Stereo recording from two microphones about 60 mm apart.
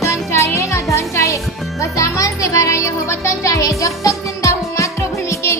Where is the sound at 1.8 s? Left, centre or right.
Left.